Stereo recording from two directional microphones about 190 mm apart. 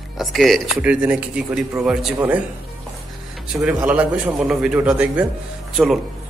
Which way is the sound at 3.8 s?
5° right (ahead or behind).